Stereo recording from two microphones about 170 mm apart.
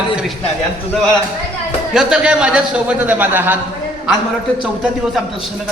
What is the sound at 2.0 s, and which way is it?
Speech, 5° right (ahead or behind).